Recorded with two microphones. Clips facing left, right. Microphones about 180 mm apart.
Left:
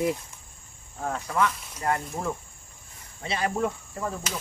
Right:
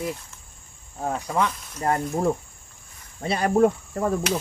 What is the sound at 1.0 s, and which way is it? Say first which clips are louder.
Speech: right 2 dB; 20° right (ahead or behind).